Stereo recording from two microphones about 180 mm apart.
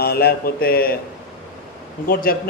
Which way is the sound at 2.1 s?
55° left (ahead or behind).